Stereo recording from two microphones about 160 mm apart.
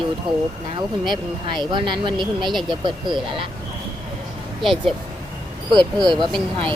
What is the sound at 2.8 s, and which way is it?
Speech, 30° right (ahead or behind).